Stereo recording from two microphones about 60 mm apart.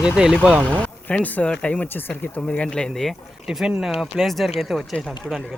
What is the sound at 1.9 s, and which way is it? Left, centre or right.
Speech, left.